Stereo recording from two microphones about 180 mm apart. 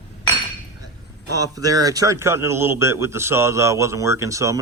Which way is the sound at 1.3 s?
20° right (ahead or behind).